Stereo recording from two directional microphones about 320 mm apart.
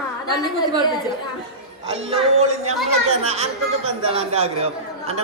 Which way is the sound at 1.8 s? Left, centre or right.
Centre.